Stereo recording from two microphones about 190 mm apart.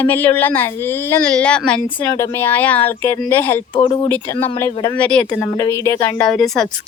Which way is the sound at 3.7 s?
25° left (ahead or behind).